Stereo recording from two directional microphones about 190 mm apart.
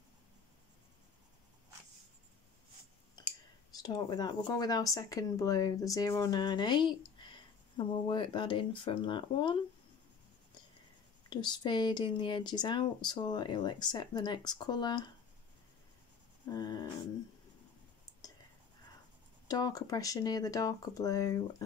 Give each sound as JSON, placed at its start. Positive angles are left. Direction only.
{"t": 3.7, "sound": "speech", "side_deg": 20}
{"t": 11.2, "sound": "speech", "side_deg": 25}
{"t": 16.4, "sound": "speech", "side_deg": 20}
{"t": 19.4, "sound": "speech", "side_deg": 20}